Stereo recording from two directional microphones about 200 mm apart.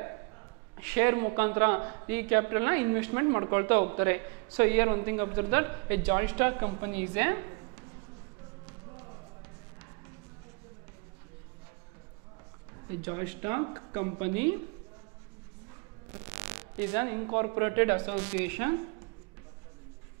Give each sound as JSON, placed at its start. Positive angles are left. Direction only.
{"t": 0.7, "sound": "a man's voice", "side_deg": -15}
{"t": 13.0, "sound": "a man's voice", "side_deg": -15}
{"t": 16.3, "sound": "a sound", "side_deg": -15}
{"t": 17.6, "sound": "a man's voice", "side_deg": -15}